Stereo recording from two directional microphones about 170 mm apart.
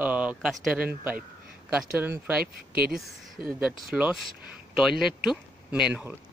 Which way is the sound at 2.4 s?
65° right (ahead or behind).